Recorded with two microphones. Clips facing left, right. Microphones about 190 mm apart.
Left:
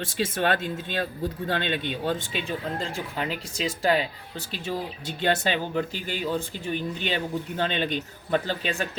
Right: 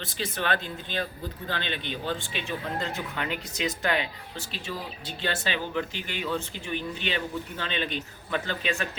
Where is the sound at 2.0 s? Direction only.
40° left (ahead or behind).